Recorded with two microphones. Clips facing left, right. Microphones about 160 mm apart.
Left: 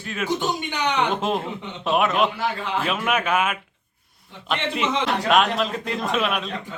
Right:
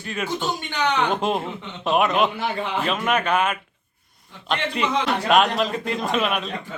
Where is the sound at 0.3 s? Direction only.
20° left (ahead or behind).